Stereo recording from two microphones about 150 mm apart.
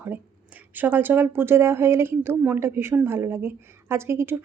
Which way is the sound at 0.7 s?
10° right (ahead or behind).